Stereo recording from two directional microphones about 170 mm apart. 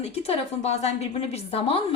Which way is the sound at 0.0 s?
35° left (ahead or behind).